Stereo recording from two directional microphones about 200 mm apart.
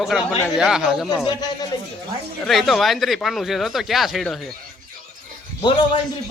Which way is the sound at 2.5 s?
Centre (ahead or behind).